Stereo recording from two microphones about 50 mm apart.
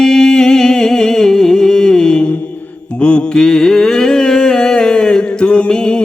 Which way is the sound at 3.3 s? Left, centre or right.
Centre.